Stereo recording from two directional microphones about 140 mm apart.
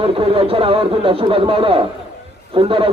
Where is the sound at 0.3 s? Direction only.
40° right (ahead or behind).